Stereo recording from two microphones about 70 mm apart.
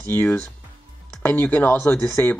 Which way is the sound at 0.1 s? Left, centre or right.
Left.